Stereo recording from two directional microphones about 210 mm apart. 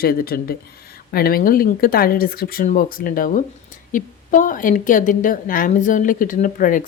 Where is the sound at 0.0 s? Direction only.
45° left (ahead or behind).